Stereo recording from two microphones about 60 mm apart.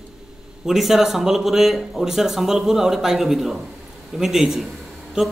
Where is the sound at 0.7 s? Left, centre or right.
Centre.